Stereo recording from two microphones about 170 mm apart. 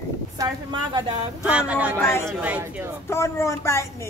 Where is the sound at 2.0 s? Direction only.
15° left (ahead or behind).